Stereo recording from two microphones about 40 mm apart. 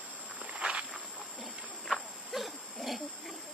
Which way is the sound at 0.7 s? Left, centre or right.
Centre.